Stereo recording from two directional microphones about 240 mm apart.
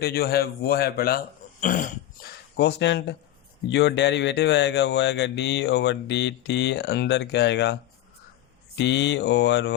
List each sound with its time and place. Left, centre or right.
0.0 s a man's voice: left
8.8 s speech: left